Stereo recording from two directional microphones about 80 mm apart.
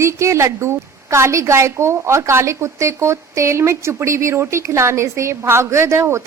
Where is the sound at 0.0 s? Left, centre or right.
Right.